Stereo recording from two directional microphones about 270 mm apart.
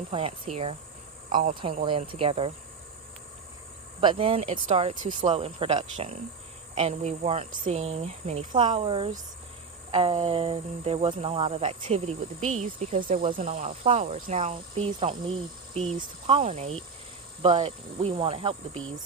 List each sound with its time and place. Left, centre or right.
0.1 s speech: right
4.0 s speech: centre